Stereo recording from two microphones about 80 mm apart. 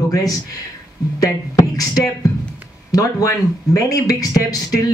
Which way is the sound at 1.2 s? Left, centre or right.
Left.